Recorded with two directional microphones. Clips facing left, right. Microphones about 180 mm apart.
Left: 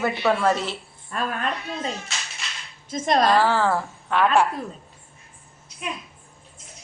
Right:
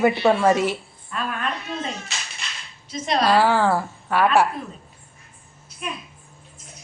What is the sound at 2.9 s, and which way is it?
Speech, 50° left (ahead or behind).